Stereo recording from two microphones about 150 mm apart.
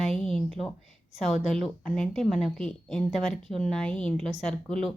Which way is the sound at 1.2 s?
Centre (ahead or behind).